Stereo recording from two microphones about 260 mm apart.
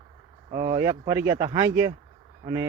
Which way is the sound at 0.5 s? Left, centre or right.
Centre.